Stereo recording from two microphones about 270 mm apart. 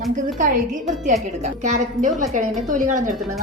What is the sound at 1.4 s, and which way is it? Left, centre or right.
Speech, right.